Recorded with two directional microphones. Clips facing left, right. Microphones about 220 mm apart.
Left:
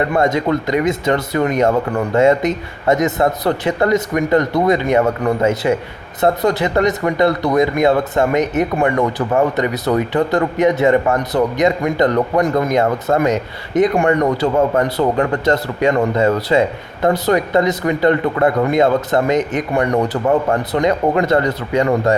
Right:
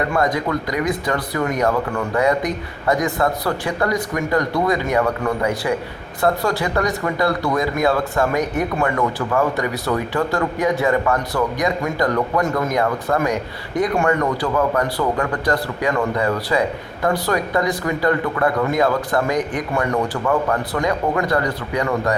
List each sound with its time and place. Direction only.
0.1 s speech: 25° left (ahead or behind)